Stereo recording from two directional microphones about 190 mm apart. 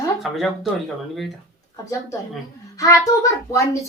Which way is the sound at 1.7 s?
15° left (ahead or behind).